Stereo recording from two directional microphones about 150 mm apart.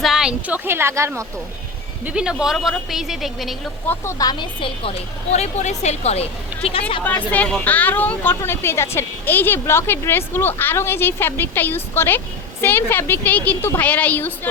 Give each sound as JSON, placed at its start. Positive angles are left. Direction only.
{"t": 0.0, "sound": "a woman's voice", "side_deg": -5}
{"t": 2.0, "sound": "speech", "side_deg": -5}
{"t": 3.8, "sound": "a woman's voice", "side_deg": 20}
{"t": 7.0, "sound": "speech", "side_deg": 10}